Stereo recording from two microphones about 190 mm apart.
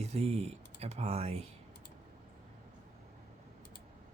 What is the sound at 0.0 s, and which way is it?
Speech, 35° right (ahead or behind).